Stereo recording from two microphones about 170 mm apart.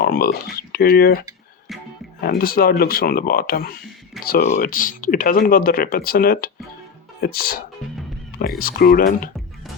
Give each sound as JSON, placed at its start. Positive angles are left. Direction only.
{"t": 0.0, "sound": "speech", "side_deg": 65}
{"t": 2.2, "sound": "speech", "side_deg": 60}